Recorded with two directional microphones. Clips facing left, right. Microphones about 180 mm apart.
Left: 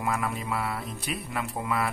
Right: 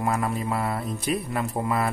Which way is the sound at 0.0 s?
40° right (ahead or behind).